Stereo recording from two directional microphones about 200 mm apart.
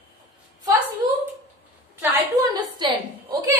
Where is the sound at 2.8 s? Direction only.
20° right (ahead or behind).